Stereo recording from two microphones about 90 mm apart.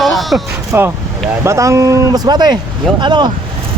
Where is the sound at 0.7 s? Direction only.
25° right (ahead or behind); by 3.3 s 55° right (ahead or behind).